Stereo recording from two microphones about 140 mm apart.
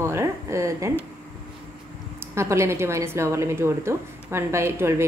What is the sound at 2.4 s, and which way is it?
A woman's voice, 20° right (ahead or behind).